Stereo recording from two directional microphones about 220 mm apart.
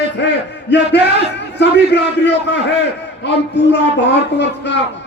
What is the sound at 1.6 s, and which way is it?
A man's voice, 50° left (ahead or behind).